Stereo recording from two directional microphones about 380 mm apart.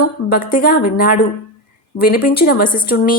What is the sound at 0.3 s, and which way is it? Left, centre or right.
A woman's voice, left.